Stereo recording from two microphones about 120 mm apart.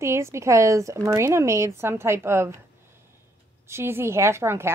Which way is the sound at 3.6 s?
20° right (ahead or behind).